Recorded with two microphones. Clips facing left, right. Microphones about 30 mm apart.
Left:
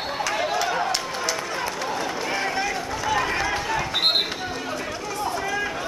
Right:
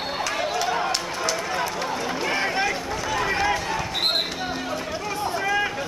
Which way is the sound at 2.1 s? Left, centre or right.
Centre.